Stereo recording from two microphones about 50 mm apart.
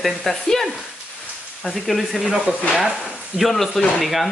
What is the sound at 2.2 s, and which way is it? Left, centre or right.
Speech, centre.